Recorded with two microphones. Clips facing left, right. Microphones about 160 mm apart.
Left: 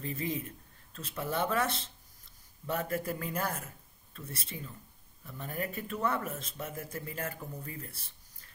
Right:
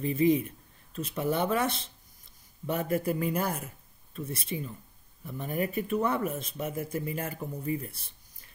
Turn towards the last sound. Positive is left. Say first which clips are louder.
# right 10 dB
turn(degrees=-15)  # may be behind; listen again after turning